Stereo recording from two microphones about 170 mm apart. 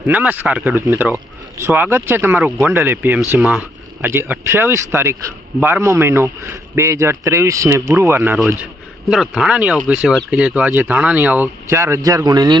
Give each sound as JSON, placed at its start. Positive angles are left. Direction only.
{"t": 0.1, "sound": "speech", "side_deg": -10}